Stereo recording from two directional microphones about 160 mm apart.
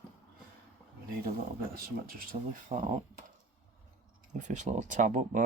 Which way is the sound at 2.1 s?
55° right (ahead or behind).